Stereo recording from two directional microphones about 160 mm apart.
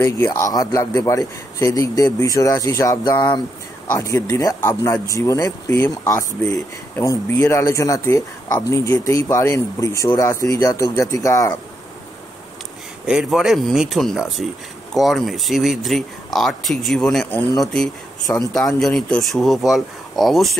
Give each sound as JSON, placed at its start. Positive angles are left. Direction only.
{"t": 0.0, "sound": "speech", "side_deg": 15}
{"t": 3.9, "sound": "speech", "side_deg": 15}
{"t": 13.0, "sound": "speech", "side_deg": -5}